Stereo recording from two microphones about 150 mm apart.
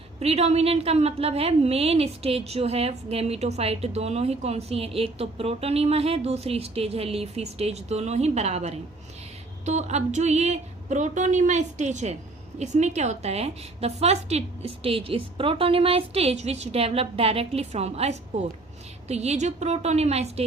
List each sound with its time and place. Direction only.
0.2 s a woman's voice: 45° right (ahead or behind)